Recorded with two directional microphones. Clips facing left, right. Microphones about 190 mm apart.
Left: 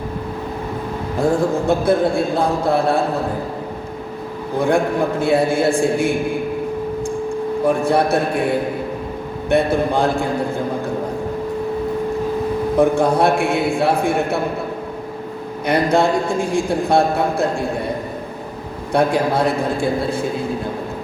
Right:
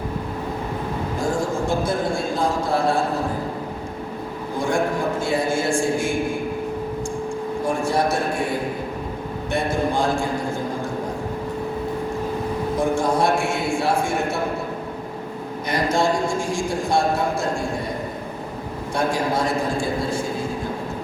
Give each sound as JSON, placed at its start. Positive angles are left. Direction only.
{"t": 1.2, "sound": "a man's voice", "side_deg": 60}
{"t": 4.5, "sound": "a man's voice", "side_deg": 60}
{"t": 7.6, "sound": "a man's voice", "side_deg": 60}
{"t": 9.5, "sound": "a man's voice", "side_deg": 60}
{"t": 12.8, "sound": "a man's voice", "side_deg": 60}
{"t": 15.6, "sound": "a man's voice", "side_deg": 60}
{"t": 18.9, "sound": "a man's voice", "side_deg": 60}